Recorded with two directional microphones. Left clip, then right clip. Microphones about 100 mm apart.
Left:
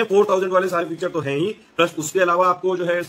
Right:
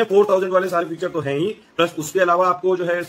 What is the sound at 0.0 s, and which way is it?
A man's voice, 20° left (ahead or behind).